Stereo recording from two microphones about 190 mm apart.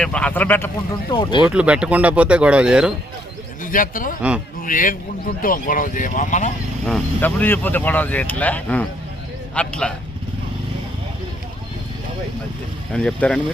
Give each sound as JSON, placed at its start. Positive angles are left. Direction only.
{"t": 0.0, "sound": "speech", "side_deg": 5}
{"t": 1.1, "sound": "speech", "side_deg": 25}
{"t": 1.5, "sound": "speech", "side_deg": -5}
{"t": 3.6, "sound": "a man's voice", "side_deg": 45}
{"t": 6.8, "sound": "speech", "side_deg": 5}
{"t": 12.9, "sound": "speech", "side_deg": 5}